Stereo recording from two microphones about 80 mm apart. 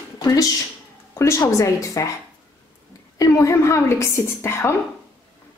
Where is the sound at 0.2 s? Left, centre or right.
Left.